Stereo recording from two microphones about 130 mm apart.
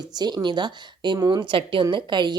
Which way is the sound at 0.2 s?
35° right (ahead or behind).